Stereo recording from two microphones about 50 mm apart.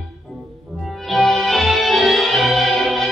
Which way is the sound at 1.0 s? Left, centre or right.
Centre.